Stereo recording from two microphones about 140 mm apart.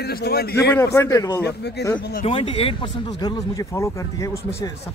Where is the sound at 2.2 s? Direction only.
40° left (ahead or behind); by 4.7 s 20° left (ahead or behind).